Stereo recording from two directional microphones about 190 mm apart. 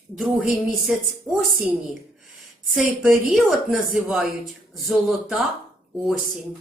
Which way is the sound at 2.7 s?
5° right (ahead or behind).